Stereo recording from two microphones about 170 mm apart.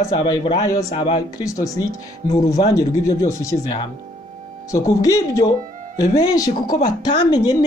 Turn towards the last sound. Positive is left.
turn(degrees=25)  # may be behind; listen again after turning